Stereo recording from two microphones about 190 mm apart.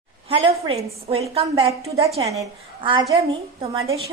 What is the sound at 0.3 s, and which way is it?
A woman's voice, 30° right (ahead or behind).